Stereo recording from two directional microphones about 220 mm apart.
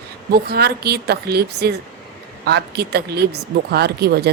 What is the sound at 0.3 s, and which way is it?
Speech, 45° right (ahead or behind).